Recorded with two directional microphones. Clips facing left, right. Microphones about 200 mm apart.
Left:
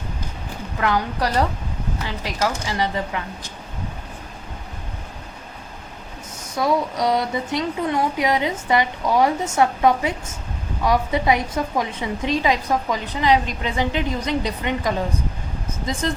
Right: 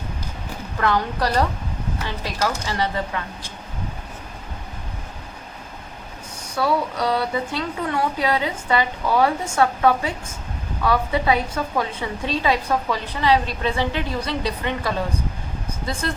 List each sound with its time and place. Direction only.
0.8 s a woman's voice: 10° left (ahead or behind)
6.6 s a woman's voice: 15° left (ahead or behind)